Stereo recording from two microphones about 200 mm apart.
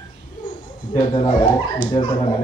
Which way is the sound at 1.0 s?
35° left (ahead or behind).